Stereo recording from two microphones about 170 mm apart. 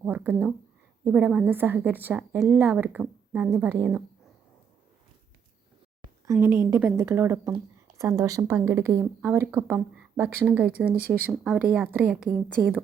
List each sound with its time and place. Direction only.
0.0 s a woman's voice: 10° right (ahead or behind)
6.3 s a woman's voice: 15° right (ahead or behind)
9.9 s a sound: 5° right (ahead or behind)
10.2 s a woman's voice: 10° right (ahead or behind); by 12.7 s 5° left (ahead or behind)